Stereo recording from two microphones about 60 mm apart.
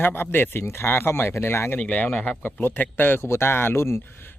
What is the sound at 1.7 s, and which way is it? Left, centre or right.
Speech, left.